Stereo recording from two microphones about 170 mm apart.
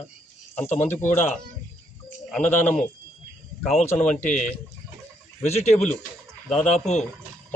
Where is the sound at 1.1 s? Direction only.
15° left (ahead or behind).